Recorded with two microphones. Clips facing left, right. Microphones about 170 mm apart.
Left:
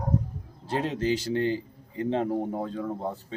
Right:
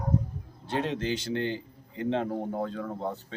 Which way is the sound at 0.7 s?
35° left (ahead or behind).